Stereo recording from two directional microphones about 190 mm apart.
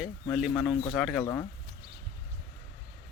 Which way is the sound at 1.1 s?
15° left (ahead or behind).